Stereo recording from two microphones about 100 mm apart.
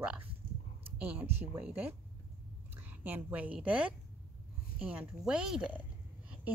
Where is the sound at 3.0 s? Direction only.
15° right (ahead or behind).